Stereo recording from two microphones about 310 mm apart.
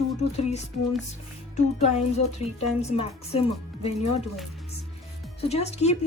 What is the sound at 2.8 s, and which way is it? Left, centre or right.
Speech, centre.